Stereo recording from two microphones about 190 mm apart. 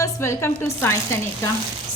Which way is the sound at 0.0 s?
15° left (ahead or behind).